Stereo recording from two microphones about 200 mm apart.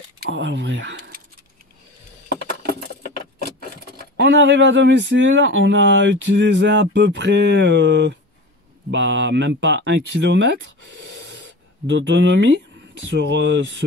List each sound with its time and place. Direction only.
0.3 s speech: 65° right (ahead or behind)
3.9 s speech: 60° right (ahead or behind)